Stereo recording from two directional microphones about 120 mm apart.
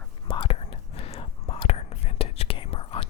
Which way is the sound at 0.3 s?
45° left (ahead or behind).